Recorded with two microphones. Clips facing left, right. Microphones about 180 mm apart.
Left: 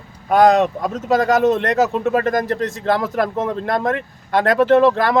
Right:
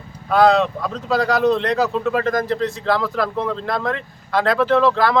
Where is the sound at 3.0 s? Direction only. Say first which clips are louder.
Left 2 dB; 45° left (ahead or behind).